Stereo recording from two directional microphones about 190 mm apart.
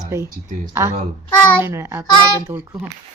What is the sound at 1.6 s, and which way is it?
Speech, 10° right (ahead or behind).